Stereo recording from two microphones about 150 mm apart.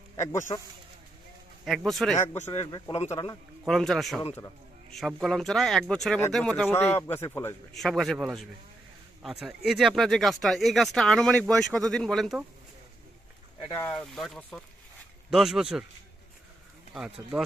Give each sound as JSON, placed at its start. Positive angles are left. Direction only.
{"t": 0.5, "sound": "speech", "side_deg": 40}
{"t": 1.6, "sound": "speech", "side_deg": 0}
{"t": 2.1, "sound": "speech", "side_deg": 15}
{"t": 2.9, "sound": "speech", "side_deg": 45}
{"t": 3.6, "sound": "speech", "side_deg": 0}
{"t": 7.7, "sound": "speech", "side_deg": 0}
{"t": 13.7, "sound": "speech", "side_deg": 10}
{"t": 16.9, "sound": "speech", "side_deg": -5}